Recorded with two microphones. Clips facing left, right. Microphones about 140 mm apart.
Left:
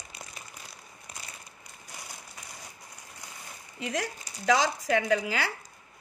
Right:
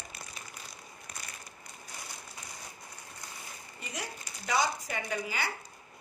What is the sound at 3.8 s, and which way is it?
Speech, 90° left.